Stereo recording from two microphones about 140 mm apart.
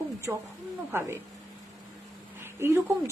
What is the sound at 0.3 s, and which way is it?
Speech, 5° right (ahead or behind).